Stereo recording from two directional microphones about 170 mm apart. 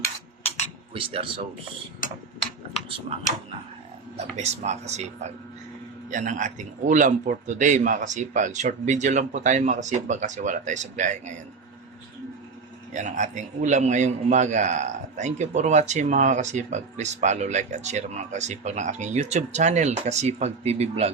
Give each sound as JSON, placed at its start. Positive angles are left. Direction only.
{"t": 0.9, "sound": "speech", "side_deg": -30}
{"t": 4.4, "sound": "a man's voice", "side_deg": -40}
{"t": 12.9, "sound": "a man's voice", "side_deg": -45}